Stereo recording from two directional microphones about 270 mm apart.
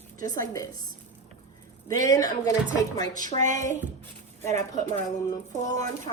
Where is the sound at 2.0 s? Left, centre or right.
Centre.